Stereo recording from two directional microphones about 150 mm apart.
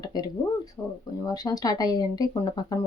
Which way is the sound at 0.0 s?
25° left (ahead or behind).